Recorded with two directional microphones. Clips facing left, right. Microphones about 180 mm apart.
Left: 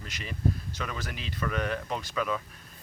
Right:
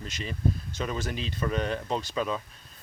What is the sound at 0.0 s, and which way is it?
Speech, 25° right (ahead or behind).